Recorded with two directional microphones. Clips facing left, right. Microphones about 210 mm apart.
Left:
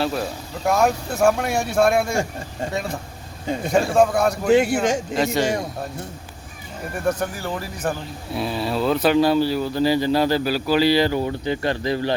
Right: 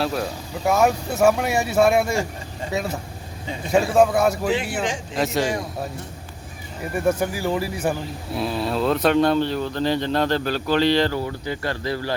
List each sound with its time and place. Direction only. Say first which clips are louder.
0.0 s speech: left 1 dB; centre (ahead or behind)
4.8 s speech: left 5 dB; 45° left (ahead or behind)
5.1 s speech: left 2 dB; centre (ahead or behind)
6.9 s speech: right 2 dB; 5° right (ahead or behind)
8.3 s speech: even; centre (ahead or behind); by 12.1 s 20° left (ahead or behind)